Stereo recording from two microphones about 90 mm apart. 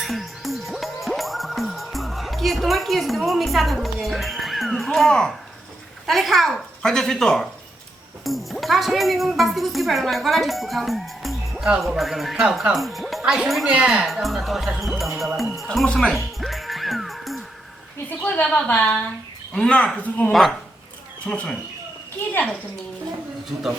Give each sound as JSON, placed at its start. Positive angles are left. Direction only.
{"t": 0.0, "sound": "music", "side_deg": 0}
{"t": 6.1, "sound": "speech", "side_deg": 0}
{"t": 14.1, "sound": "music", "side_deg": 0}
{"t": 18.2, "sound": "a woman's voice", "side_deg": 15}